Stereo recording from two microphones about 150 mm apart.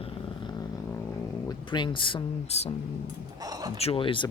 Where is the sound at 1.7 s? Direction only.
30° left (ahead or behind).